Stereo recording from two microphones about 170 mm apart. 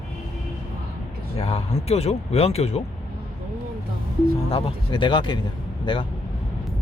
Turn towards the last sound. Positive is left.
turn(degrees=30)  # may be behind; listen again after turning